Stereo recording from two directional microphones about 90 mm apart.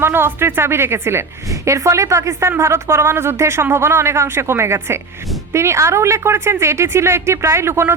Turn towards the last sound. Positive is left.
turn(degrees=-30)  # may be behind; listen again after turning